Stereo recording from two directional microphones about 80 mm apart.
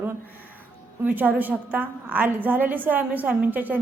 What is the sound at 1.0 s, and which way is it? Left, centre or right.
A woman's voice, right.